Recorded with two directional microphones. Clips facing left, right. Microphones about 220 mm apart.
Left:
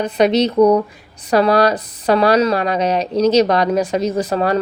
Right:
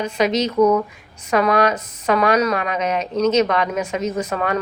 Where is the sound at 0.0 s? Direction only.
35° left (ahead or behind).